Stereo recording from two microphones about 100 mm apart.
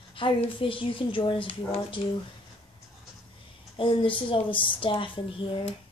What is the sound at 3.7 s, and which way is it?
A woman's voice, 60° left (ahead or behind).